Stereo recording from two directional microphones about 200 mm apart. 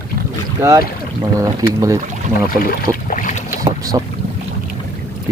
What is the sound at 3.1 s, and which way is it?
Boat, 40° left (ahead or behind).